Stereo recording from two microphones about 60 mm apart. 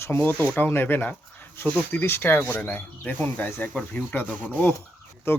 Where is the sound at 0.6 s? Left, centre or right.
Left.